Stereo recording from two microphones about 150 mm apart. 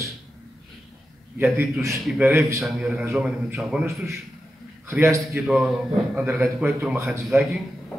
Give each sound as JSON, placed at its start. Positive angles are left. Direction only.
{"t": 1.6, "sound": "a man's voice", "side_deg": -20}
{"t": 2.6, "sound": "a man's voice", "side_deg": -5}
{"t": 3.8, "sound": "a man's voice", "side_deg": -20}
{"t": 5.5, "sound": "a man's voice", "side_deg": 0}